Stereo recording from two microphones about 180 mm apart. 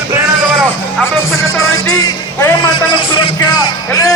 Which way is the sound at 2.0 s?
20° left (ahead or behind).